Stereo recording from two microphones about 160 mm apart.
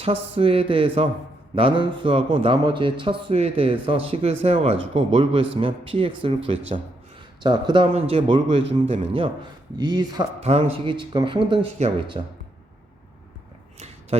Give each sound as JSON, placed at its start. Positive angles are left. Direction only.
{"t": 0.0, "sound": "a man's voice", "side_deg": -35}
{"t": 10.4, "sound": "a man's voice", "side_deg": -40}
{"t": 10.9, "sound": "a man's voice", "side_deg": -30}
{"t": 13.7, "sound": "a sound", "side_deg": -45}